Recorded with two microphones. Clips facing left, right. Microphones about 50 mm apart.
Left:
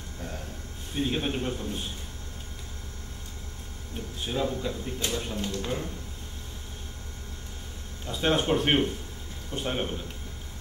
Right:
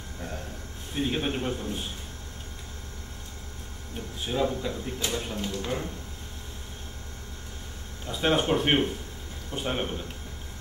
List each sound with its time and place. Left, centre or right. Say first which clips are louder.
0.2 s a sound: right 1 dB; centre
0.9 s speech: even; centre
3.9 s speech: right 1 dB; centre
8.1 s speech: right 1 dB; centre